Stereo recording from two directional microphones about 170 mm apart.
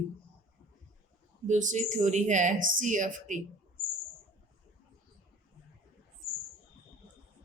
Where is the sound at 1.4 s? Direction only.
45° right (ahead or behind).